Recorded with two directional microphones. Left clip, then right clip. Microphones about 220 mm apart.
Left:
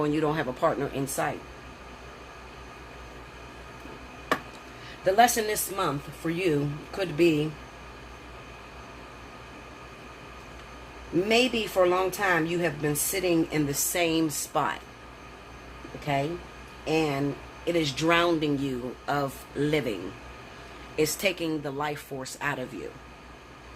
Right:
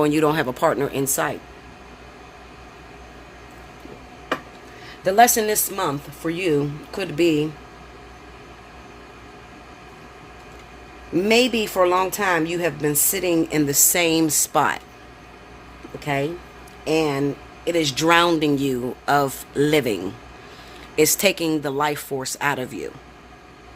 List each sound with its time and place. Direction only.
0.0 s speech: 50° right (ahead or behind)
5.0 s speech: 45° right (ahead or behind)
11.3 s speech: 50° right (ahead or behind)
16.0 s speech: 45° right (ahead or behind)